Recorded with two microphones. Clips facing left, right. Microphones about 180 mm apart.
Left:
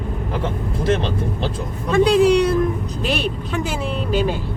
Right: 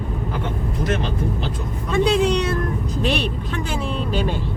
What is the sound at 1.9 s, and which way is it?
Speech, centre (ahead or behind).